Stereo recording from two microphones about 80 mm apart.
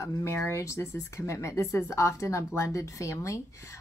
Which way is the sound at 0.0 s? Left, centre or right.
Left.